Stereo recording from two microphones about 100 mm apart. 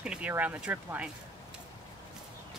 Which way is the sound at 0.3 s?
15° right (ahead or behind).